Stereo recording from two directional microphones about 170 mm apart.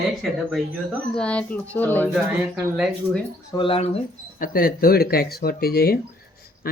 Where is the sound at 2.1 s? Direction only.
5° right (ahead or behind).